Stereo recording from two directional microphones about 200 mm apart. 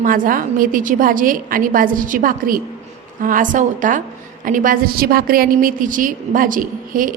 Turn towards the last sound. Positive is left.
turn(degrees=-45)  # may be behind; listen again after turning